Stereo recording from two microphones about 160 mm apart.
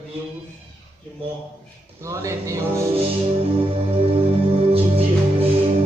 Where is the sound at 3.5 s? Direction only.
35° right (ahead or behind).